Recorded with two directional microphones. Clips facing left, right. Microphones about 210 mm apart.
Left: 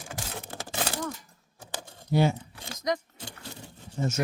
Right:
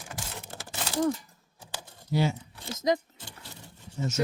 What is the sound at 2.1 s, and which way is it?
Speech, 50° left (ahead or behind).